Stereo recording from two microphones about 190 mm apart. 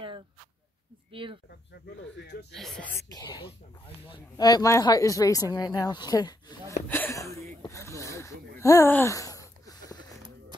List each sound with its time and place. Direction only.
1.1 s speech: 25° right (ahead or behind)
1.7 s speech: 65° left (ahead or behind)
2.5 s speech: centre (ahead or behind)
3.1 s speech: 20° left (ahead or behind)